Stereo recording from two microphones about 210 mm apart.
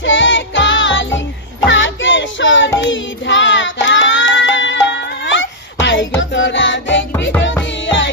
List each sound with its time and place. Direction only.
0.0 s music: 65° left (ahead or behind)
1.7 s child singing: 60° left (ahead or behind)
2.8 s music: 60° left (ahead or behind)